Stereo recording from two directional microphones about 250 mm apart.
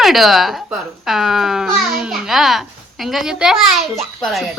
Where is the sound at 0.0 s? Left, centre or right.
Centre.